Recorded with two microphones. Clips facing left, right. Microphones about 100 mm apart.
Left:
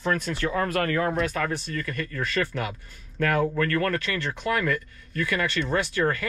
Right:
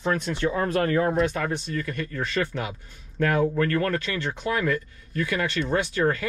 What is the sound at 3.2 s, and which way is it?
Speech, 65° left (ahead or behind).